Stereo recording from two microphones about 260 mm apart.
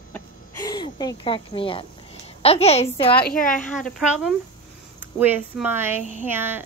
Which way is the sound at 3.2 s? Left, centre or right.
Left.